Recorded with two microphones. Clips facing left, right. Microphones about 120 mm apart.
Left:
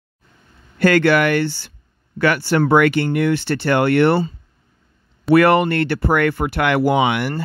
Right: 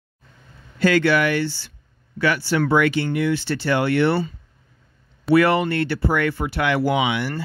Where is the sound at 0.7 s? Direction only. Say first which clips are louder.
Left 3 dB; 55° left (ahead or behind).